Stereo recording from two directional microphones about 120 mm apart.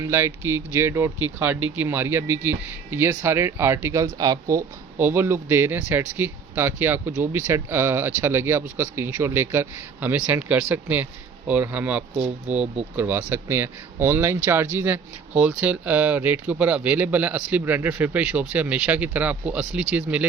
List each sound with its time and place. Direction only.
0.0 s speech: 20° right (ahead or behind)